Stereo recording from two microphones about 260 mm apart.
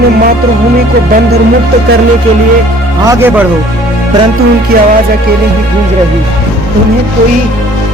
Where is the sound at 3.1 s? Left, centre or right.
Centre.